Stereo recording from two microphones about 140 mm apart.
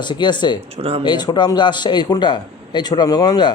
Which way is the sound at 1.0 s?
30° left (ahead or behind).